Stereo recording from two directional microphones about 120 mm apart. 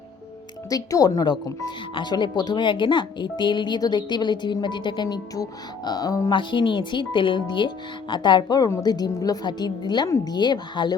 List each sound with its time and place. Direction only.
0.7 s speech: 30° left (ahead or behind)
6.3 s speech: 40° left (ahead or behind)